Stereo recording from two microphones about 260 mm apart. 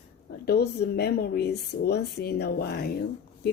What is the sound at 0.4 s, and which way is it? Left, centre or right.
Speech, left.